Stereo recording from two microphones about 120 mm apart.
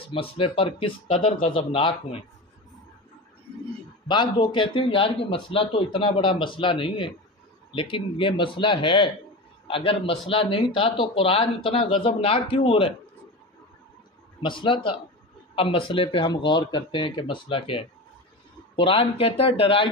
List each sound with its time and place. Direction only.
0.0 s speech: 50° left (ahead or behind)
4.1 s speech: 40° left (ahead or behind)
14.4 s speech: 45° left (ahead or behind)